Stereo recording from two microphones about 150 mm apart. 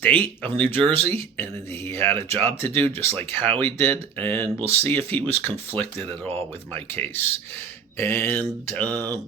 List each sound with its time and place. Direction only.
0.0 s speech: 10° left (ahead or behind)
6.0 s speech: 40° right (ahead or behind)
6.3 s speech: 10° left (ahead or behind)